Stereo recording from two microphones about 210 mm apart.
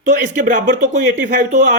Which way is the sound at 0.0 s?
40° right (ahead or behind).